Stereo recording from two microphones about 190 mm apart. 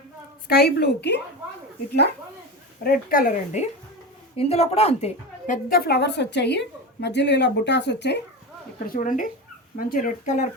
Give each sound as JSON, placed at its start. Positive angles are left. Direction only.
{"t": 0.4, "sound": "a woman's voice", "side_deg": 55}
{"t": 2.8, "sound": "a woman's voice", "side_deg": 50}
{"t": 5.6, "sound": "a woman's voice", "side_deg": 50}
{"t": 8.9, "sound": "speech", "side_deg": 45}